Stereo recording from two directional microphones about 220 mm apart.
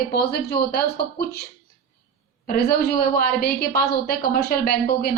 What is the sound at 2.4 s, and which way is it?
A woman's voice, 45° left (ahead or behind).